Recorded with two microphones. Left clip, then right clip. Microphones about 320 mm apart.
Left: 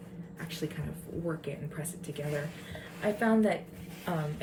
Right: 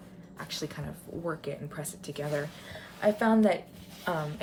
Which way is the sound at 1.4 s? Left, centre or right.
Centre.